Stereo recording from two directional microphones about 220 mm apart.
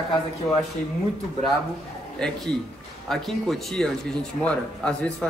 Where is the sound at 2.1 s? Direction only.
5° left (ahead or behind).